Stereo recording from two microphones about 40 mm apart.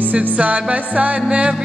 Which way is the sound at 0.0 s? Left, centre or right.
Right.